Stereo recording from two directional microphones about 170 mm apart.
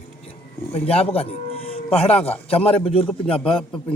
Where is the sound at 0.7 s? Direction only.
35° left (ahead or behind).